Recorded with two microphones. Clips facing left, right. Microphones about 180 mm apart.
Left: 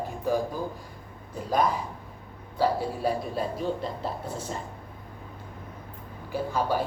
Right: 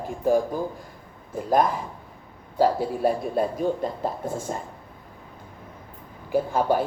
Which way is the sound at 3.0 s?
50° right (ahead or behind).